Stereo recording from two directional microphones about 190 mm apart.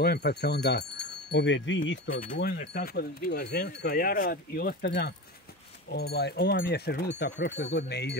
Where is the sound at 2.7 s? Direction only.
55° left (ahead or behind).